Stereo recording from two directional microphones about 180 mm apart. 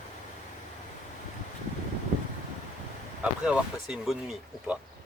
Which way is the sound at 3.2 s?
5° right (ahead or behind).